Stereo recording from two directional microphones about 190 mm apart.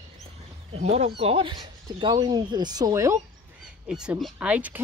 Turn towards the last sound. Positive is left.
turn(degrees=-5)  # may be behind; listen again after turning